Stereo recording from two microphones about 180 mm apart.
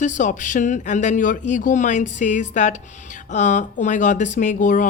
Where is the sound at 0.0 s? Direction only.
45° left (ahead or behind).